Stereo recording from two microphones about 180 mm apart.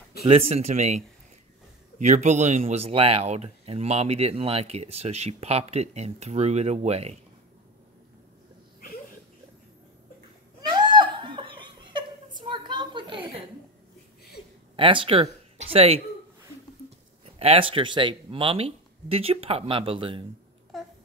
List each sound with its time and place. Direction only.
0.2 s speech: 35° right (ahead or behind)
10.7 s chuckle: 25° right (ahead or behind)
14.8 s speech: 30° right (ahead or behind)
17.4 s speech: 30° right (ahead or behind)
20.7 s babbling: centre (ahead or behind)